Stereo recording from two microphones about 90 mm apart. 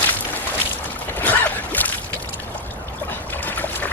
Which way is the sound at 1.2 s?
20° left (ahead or behind).